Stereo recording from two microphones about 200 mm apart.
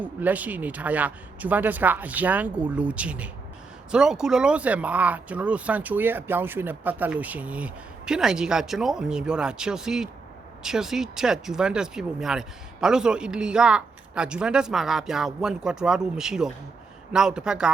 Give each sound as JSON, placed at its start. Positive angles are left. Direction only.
{"t": 0.0, "sound": "speech", "side_deg": -10}